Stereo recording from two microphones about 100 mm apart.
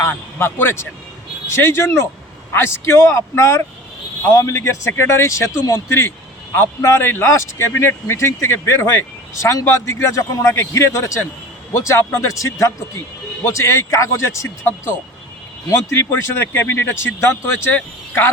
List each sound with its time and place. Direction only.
0.0 s a man's voice: 25° left (ahead or behind)